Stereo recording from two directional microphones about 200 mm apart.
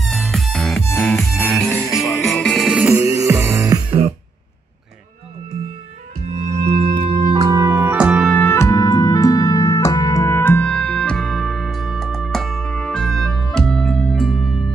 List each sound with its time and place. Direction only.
0.0 s music: centre (ahead or behind)
6.6 s music: 30° right (ahead or behind)
7.2 s music: 20° right (ahead or behind); by 14.7 s centre (ahead or behind)